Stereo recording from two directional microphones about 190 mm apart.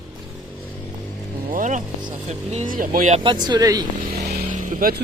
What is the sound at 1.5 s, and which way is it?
Speech, 40° right (ahead or behind).